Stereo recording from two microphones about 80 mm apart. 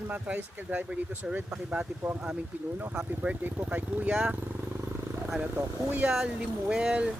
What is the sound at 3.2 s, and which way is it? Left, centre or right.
Speech, centre.